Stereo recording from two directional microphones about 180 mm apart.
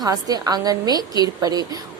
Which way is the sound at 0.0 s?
20° right (ahead or behind).